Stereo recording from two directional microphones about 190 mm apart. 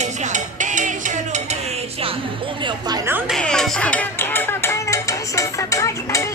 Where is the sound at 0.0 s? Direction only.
40° right (ahead or behind).